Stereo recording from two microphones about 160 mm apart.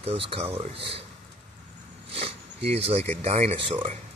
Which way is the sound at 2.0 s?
35° right (ahead or behind).